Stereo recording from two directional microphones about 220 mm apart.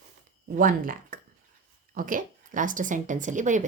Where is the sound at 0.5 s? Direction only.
40° right (ahead or behind).